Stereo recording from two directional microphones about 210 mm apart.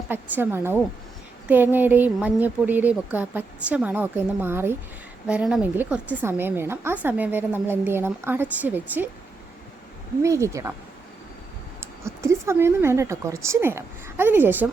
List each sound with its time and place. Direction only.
0.1 s a woman's voice: 10° right (ahead or behind)
10.2 s a woman's voice: 15° right (ahead or behind)
11.8 s a woman's voice: 15° right (ahead or behind)